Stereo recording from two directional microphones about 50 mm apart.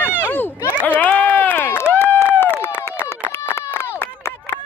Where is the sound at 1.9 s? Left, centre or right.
Left.